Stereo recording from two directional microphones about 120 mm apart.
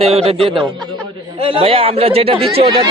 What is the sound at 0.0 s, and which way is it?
Speech, 60° right (ahead or behind).